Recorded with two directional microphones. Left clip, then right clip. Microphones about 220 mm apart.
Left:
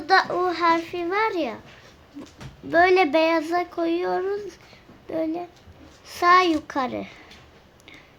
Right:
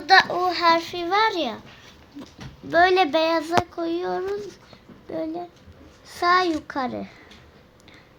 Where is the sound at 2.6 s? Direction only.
15° left (ahead or behind).